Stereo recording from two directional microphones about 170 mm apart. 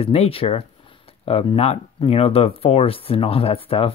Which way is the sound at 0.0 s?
35° left (ahead or behind).